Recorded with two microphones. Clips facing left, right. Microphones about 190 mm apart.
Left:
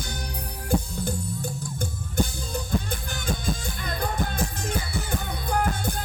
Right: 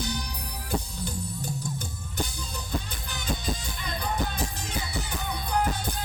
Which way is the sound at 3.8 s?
50° left (ahead or behind).